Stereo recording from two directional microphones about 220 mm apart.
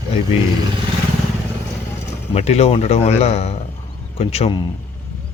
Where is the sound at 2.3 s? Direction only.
30° left (ahead or behind).